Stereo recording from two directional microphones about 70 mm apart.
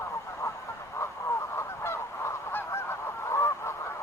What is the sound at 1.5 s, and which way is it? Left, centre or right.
Goose, left.